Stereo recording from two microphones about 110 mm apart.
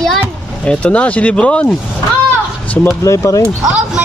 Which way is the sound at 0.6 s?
10° left (ahead or behind).